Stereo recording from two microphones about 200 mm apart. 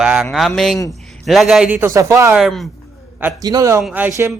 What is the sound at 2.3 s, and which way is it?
Speech, centre (ahead or behind).